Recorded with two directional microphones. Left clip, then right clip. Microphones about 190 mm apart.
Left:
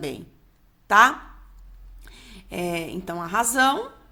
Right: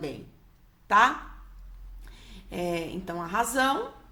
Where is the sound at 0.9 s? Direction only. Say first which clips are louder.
Left 5 dB; 25° left (ahead or behind).